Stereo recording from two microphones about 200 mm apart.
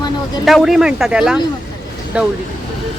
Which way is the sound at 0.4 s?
Centre (ahead or behind).